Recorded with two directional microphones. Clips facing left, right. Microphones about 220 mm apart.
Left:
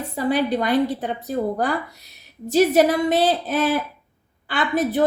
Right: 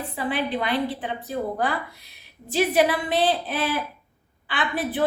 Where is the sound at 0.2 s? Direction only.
40° left (ahead or behind).